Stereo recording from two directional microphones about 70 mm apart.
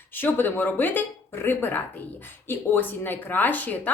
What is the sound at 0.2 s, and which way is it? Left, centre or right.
A woman's voice, left.